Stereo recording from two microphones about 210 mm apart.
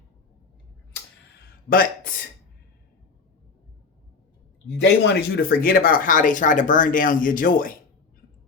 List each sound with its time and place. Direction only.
4.8 s speech: 50° left (ahead or behind)